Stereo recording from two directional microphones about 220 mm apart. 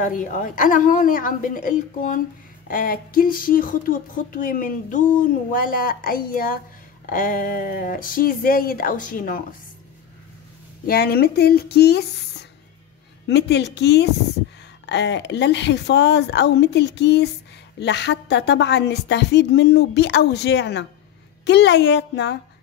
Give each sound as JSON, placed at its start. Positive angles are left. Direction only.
{"t": 0.0, "sound": "speech", "side_deg": 35}
{"t": 10.9, "sound": "a woman's voice", "side_deg": 45}